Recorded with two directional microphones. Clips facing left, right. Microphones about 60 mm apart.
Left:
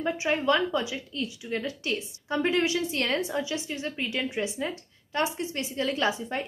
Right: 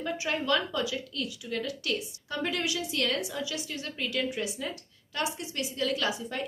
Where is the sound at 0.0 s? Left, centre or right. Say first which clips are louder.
Left 5 dB; left.